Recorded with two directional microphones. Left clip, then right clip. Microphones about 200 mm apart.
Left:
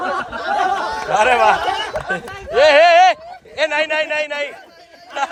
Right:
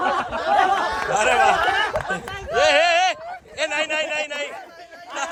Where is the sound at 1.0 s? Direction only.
5° right (ahead or behind).